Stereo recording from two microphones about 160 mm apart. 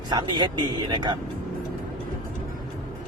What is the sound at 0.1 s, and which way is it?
Speech, 25° right (ahead or behind).